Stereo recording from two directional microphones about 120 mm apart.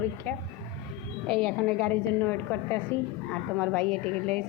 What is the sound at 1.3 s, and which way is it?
Speech, 5° left (ahead or behind).